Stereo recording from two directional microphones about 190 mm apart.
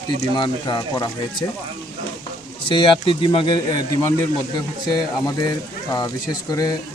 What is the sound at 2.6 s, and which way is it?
Speech, 30° left (ahead or behind).